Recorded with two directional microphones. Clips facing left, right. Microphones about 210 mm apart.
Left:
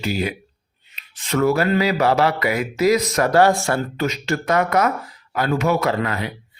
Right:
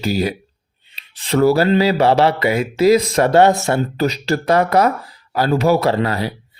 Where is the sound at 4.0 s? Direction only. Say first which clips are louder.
Right 4 dB; 35° right (ahead or behind).